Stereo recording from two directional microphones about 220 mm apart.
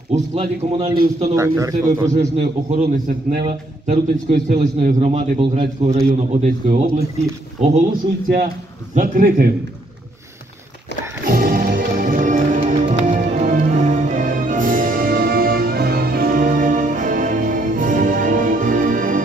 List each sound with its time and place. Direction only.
0.1 s a man's voice: 30° right (ahead or behind)
0.9 s a man's voice: 40° right (ahead or behind)
1.3 s speech: 15° right (ahead or behind)
2.1 s a man's voice: 35° right (ahead or behind)
8.9 s a man's voice: 40° right (ahead or behind)
11.2 s music: 40° right (ahead or behind)